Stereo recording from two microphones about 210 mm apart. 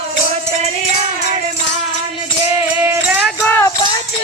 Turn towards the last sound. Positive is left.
turn(degrees=10)  # may be behind; listen again after turning